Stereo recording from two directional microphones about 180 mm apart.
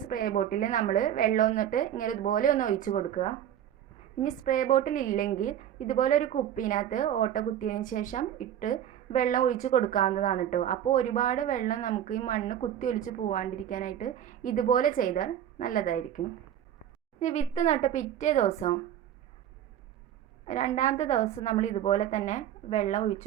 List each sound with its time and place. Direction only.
0.0 s a woman's voice: 50° left (ahead or behind)
4.2 s a woman's voice: 50° left (ahead or behind)
20.7 s a woman's voice: 40° left (ahead or behind)